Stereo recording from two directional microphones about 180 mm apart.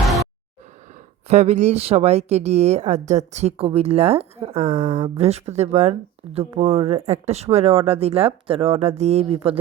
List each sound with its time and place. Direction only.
1.3 s speech: 40° right (ahead or behind)